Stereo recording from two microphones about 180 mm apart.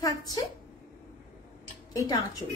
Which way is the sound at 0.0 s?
20° left (ahead or behind).